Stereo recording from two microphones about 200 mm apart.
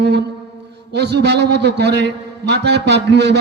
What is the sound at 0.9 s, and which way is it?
A man's voice, 60° right (ahead or behind).